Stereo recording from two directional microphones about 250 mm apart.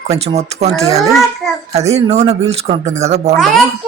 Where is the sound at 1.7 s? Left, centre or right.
Right.